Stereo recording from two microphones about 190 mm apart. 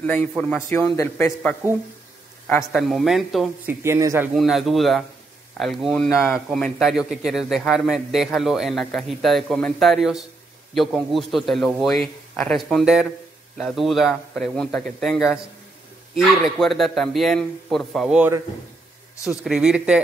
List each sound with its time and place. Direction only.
0.0 s a man's voice: 10° left (ahead or behind)
2.7 s a man's voice: centre (ahead or behind)
3.8 s speech: 15° right (ahead or behind)
4.4 s a man's voice: centre (ahead or behind)